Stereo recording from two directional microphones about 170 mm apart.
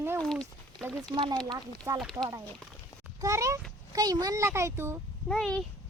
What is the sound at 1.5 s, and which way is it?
A child's voice, 25° right (ahead or behind).